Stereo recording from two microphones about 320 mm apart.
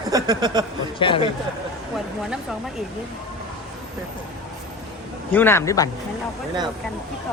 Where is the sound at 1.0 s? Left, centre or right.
Centre.